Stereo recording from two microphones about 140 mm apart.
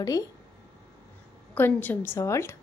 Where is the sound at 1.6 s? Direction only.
15° left (ahead or behind).